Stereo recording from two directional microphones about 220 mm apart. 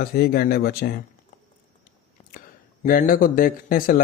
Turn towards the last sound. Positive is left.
turn(degrees=40)  # may be behind; listen again after turning